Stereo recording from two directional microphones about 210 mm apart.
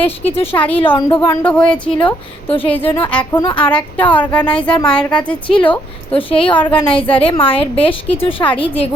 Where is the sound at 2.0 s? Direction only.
25° left (ahead or behind).